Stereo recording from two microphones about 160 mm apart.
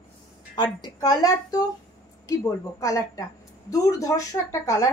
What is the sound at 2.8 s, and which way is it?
Speech, 20° left (ahead or behind).